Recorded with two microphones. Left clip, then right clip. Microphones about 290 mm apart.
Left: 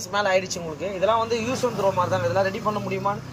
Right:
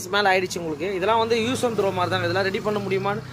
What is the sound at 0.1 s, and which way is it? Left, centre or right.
Speech, centre.